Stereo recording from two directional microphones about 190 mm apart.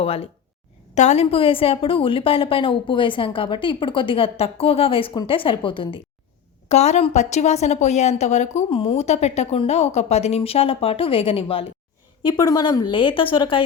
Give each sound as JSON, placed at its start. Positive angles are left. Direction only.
{"t": 0.0, "sound": "a woman's voice", "side_deg": 30}
{"t": 12.2, "sound": "a woman's voice", "side_deg": 20}